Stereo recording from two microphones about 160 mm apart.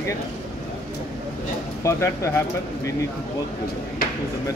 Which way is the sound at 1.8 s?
20° left (ahead or behind).